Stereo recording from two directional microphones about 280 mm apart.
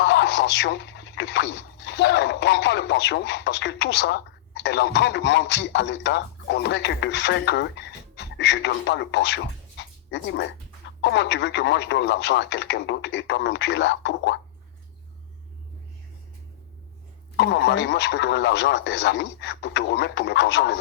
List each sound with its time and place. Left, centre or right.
0.0 s speech: left
17.3 s speech: left